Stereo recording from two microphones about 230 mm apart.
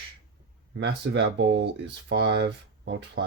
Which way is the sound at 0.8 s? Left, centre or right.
Right.